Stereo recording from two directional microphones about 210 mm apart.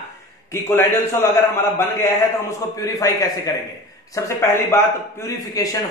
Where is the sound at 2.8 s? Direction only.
15° left (ahead or behind).